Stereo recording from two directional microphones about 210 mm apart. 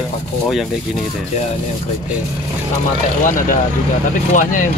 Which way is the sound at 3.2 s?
40° left (ahead or behind).